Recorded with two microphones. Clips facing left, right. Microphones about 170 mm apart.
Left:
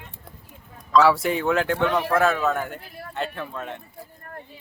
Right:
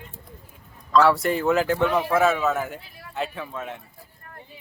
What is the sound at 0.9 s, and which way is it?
A man's voice, centre (ahead or behind).